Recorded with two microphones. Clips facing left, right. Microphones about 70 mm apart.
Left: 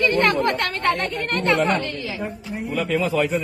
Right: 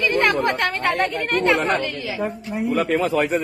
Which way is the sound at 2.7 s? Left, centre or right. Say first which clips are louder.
Right 1 dB; right.